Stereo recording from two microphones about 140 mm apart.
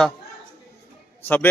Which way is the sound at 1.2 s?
15° left (ahead or behind).